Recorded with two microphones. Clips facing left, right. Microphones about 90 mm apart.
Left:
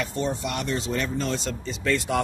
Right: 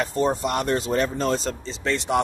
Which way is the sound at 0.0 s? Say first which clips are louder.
Right 5 dB; 40° right (ahead or behind).